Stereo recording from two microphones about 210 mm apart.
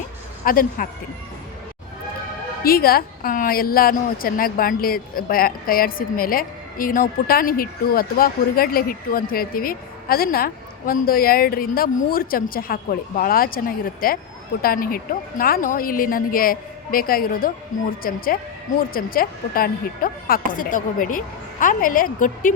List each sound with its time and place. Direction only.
0.4 s a woman's voice: 40° left (ahead or behind)
2.6 s a woman's voice: 45° left (ahead or behind)